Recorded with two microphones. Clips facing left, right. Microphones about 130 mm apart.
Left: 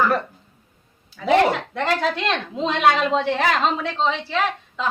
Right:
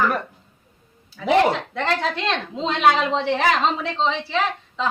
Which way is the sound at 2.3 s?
5° left (ahead or behind).